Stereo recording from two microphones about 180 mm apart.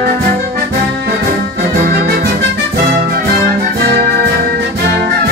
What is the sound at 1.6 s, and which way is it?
Music, 55° right (ahead or behind).